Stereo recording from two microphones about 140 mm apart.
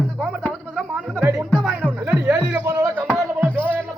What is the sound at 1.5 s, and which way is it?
Music, centre (ahead or behind).